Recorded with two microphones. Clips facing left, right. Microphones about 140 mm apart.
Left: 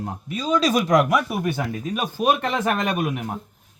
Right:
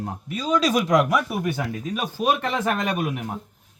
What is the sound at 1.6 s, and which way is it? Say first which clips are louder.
Speech: left 1 dB; 50° left (ahead or behind).